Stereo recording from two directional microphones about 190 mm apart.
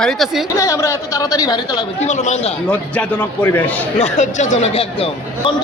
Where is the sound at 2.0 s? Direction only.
40° left (ahead or behind).